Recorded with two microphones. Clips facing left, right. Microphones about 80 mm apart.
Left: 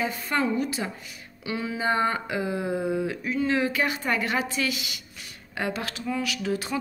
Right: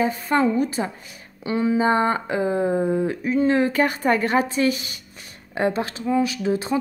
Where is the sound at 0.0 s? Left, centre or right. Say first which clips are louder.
Right 6 dB; right.